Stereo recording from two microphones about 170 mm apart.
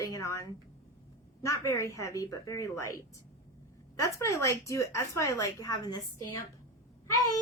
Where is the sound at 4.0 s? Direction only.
15° left (ahead or behind).